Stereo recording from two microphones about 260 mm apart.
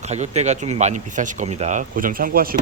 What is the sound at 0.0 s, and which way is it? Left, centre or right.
Speech, right.